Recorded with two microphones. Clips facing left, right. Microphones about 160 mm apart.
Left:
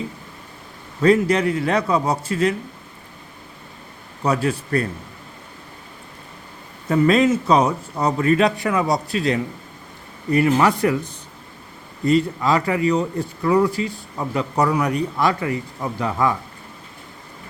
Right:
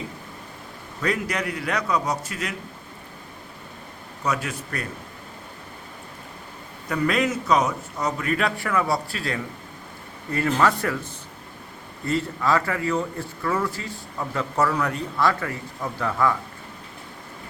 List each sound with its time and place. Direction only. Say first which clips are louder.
1.0 s a man's voice: left 10 dB; 30° left (ahead or behind)
4.2 s a man's voice: left 7 dB; 30° left (ahead or behind)
6.8 s a man's voice: left 7 dB; 25° left (ahead or behind)